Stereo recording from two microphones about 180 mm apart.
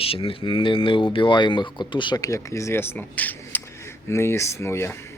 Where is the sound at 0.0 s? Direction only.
30° left (ahead or behind); by 4.9 s 15° left (ahead or behind).